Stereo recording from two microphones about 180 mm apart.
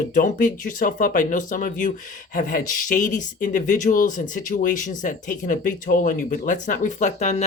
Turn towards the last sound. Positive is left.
turn(degrees=40)  # may be behind; listen again after turning